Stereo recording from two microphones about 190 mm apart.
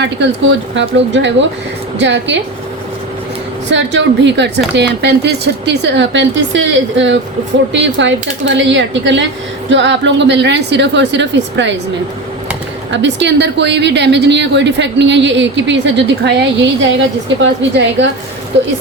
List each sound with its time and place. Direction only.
0.0 s a woman's voice: 70° right (ahead or behind)
3.7 s a woman's voice: 70° right (ahead or behind)
12.9 s a woman's voice: 70° right (ahead or behind)